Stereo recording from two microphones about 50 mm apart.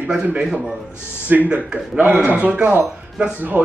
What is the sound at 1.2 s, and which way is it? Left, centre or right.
A woman's voice, right.